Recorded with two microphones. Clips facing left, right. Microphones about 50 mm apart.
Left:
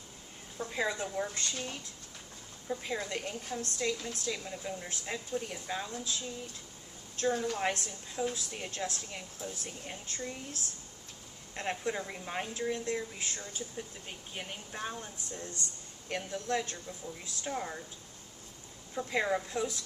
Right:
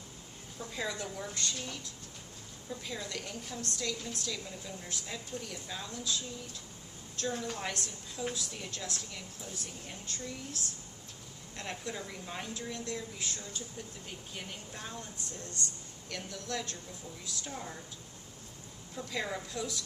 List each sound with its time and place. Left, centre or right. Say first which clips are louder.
0.6 s a woman's voice: left 4 dB; left
16.0 s a woman's voice: left 6 dB; left
18.9 s a woman's voice: left 6 dB; left